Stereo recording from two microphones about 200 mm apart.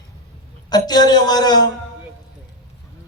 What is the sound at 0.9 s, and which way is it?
Speech, 20° left (ahead or behind).